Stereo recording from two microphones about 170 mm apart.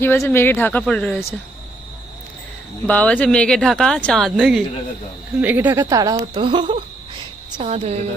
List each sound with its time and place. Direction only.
0.0 s speech: 10° left (ahead or behind)
2.8 s speech: 10° left (ahead or behind); by 8.0 s 40° right (ahead or behind)